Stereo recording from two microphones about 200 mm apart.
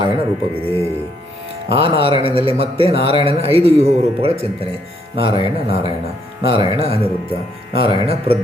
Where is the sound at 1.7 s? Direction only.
30° right (ahead or behind).